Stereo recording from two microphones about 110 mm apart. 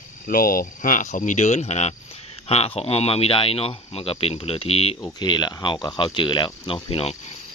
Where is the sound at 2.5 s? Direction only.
70° left (ahead or behind).